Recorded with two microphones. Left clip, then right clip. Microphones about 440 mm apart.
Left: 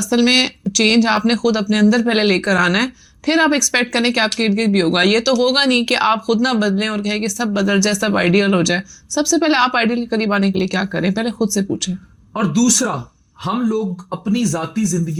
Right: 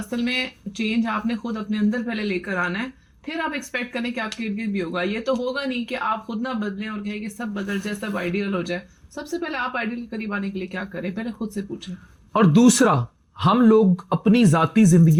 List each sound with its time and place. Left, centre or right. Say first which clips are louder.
0.1 s speech: left 11 dB; left
12.3 s a man's voice: even; right
13.4 s speech: right 4 dB; right